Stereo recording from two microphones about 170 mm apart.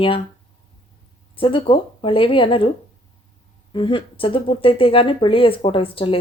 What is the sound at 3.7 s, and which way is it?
Speech, 30° left (ahead or behind).